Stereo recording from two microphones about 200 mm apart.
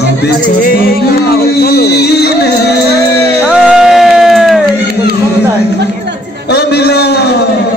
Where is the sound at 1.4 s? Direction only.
50° left (ahead or behind).